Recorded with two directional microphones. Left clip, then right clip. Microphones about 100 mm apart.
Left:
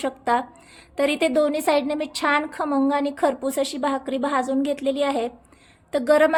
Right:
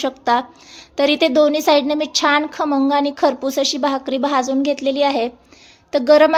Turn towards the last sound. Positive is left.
turn(degrees=-30)  # may be behind; listen again after turning